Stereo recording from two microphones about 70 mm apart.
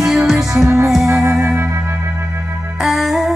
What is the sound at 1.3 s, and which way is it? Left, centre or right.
Music, right.